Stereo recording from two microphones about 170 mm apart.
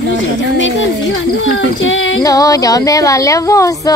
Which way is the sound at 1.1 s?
90° left.